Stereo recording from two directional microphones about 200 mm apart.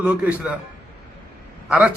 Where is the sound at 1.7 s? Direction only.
5° right (ahead or behind).